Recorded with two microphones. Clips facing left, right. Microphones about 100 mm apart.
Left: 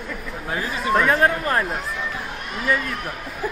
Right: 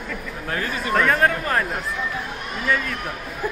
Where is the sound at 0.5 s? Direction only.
15° left (ahead or behind).